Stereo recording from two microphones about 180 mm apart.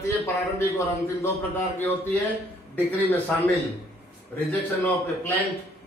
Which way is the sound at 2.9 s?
10° left (ahead or behind).